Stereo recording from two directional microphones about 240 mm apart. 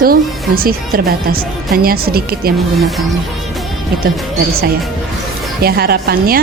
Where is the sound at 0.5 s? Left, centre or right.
Right.